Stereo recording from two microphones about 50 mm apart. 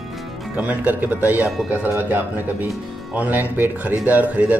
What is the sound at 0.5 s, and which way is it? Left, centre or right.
A man's voice, right.